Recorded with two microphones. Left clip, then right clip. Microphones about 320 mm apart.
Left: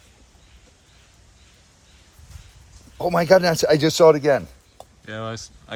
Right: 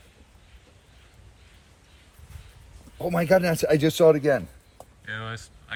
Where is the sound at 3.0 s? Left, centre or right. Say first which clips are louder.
Left 5 dB; left.